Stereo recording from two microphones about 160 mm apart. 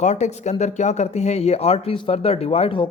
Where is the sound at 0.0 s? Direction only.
45° left (ahead or behind).